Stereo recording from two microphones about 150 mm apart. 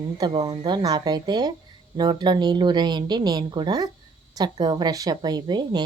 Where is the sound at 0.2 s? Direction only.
30° right (ahead or behind).